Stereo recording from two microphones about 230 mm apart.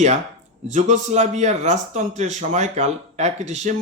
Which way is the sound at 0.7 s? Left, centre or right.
Right.